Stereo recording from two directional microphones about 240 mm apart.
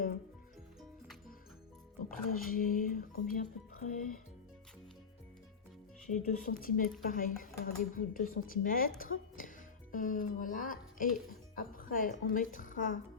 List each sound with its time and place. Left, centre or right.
2.0 s speech: left
6.1 s speech: left